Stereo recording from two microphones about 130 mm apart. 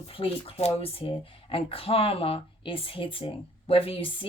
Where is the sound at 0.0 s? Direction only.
45° left (ahead or behind).